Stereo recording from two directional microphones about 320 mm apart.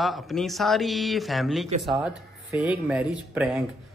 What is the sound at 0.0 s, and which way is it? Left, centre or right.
A man's voice, centre.